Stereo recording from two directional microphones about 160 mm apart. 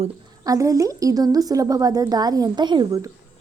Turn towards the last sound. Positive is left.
turn(degrees=-20)  # may be behind; listen again after turning